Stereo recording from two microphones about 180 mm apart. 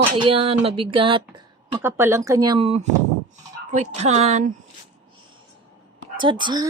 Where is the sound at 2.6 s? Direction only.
35° right (ahead or behind).